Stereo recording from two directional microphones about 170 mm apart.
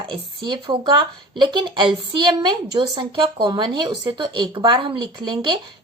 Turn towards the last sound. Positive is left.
turn(degrees=-30)  # may be behind; listen again after turning